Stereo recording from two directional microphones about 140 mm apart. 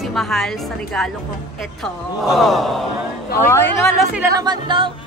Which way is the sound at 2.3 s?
Centre (ahead or behind).